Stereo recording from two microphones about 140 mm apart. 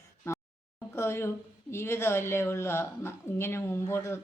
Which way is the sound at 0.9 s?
20° left (ahead or behind).